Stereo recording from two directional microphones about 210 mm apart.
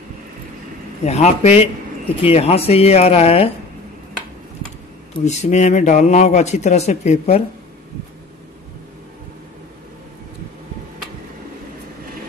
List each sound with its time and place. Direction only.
1.0 s speech: 30° left (ahead or behind)
5.2 s a man's voice: 35° left (ahead or behind)